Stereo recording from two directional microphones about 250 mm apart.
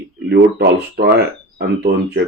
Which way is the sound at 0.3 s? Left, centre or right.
Right.